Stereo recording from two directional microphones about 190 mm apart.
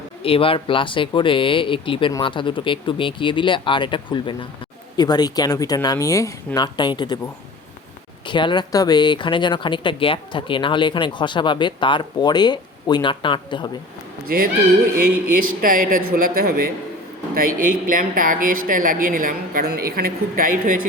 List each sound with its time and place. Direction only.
0.2 s speech: 30° left (ahead or behind)
8.3 s speech: 25° left (ahead or behind)
14.3 s speech: 50° right (ahead or behind)
15.6 s speech: 45° right (ahead or behind)